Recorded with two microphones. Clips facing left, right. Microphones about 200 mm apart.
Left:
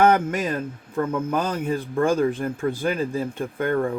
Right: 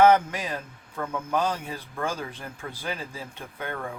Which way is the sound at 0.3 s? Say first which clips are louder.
Left 8 dB; 50° left (ahead or behind).